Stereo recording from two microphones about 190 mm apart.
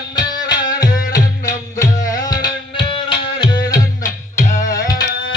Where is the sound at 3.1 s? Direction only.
25° left (ahead or behind).